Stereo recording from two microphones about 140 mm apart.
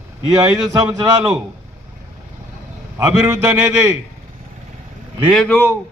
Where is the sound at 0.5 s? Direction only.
25° right (ahead or behind).